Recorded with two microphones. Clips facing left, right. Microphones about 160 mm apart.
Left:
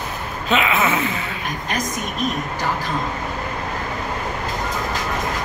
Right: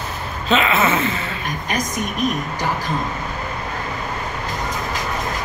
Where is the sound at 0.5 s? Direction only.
10° left (ahead or behind).